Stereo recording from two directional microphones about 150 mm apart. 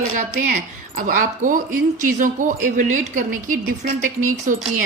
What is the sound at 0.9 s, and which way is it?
Speech, 65° right (ahead or behind).